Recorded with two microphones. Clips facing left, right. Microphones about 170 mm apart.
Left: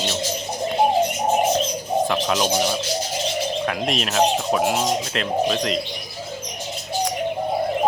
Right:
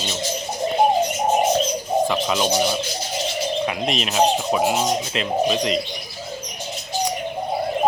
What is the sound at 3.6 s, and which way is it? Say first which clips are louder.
Speech: even; centre (ahead or behind).